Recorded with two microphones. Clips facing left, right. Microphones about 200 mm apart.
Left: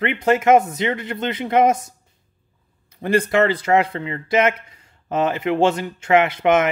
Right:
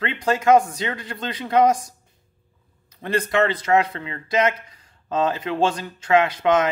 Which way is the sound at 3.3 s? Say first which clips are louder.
Right 1 dB; 30° left (ahead or behind).